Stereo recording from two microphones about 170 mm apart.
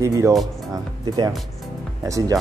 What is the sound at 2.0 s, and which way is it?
Speech, 20° right (ahead or behind).